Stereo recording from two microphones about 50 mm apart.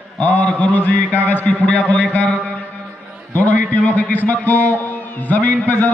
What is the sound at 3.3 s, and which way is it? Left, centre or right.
A man's voice, left.